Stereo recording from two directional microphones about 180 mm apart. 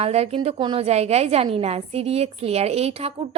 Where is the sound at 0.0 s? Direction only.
35° right (ahead or behind).